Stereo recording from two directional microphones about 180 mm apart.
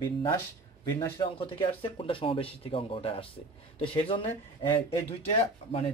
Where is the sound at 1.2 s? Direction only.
30° left (ahead or behind).